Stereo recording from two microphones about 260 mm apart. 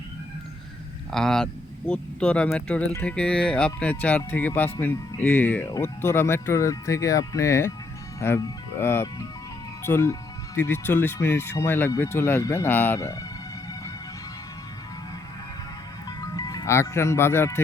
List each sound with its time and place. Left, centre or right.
1.1 s speech: centre
16.0 s music: centre